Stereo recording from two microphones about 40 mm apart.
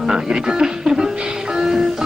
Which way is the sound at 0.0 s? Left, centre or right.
Centre.